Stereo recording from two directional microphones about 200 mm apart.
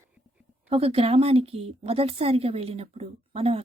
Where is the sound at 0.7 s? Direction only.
30° right (ahead or behind).